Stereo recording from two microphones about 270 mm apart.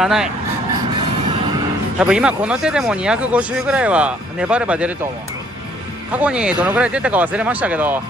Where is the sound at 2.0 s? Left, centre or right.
Centre.